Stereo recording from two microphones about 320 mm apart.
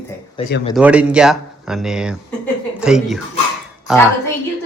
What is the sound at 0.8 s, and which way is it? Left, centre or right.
Speech, centre.